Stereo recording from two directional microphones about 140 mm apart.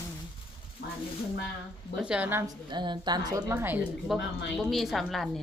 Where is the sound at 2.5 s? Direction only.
35° right (ahead or behind); by 3.8 s 15° right (ahead or behind).